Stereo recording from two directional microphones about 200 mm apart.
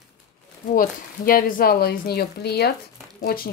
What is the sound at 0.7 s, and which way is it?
Speech, 45° left (ahead or behind).